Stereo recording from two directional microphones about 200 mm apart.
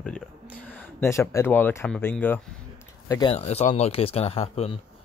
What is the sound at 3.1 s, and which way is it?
Speech, 25° left (ahead or behind).